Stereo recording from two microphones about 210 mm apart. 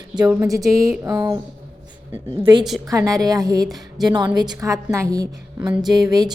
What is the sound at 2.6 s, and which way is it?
Speech, centre (ahead or behind).